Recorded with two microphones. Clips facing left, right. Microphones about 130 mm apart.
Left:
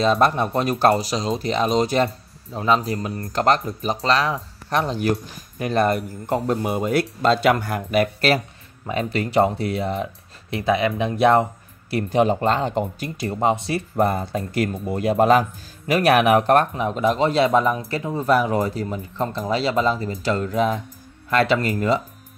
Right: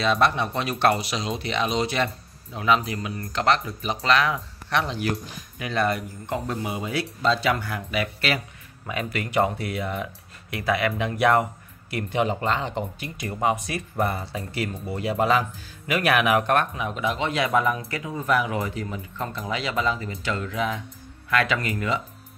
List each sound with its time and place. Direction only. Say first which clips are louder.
0.0 s speech: left 4 dB; 40° left (ahead or behind)
8.8 s speech: left 5 dB; 30° left (ahead or behind)
11.9 s speech: left 6 dB; 35° left (ahead or behind)